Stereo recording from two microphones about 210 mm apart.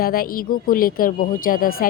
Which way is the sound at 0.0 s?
45° left (ahead or behind).